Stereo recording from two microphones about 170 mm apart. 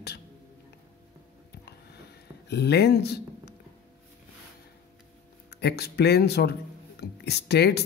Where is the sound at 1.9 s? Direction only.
75° left (ahead or behind).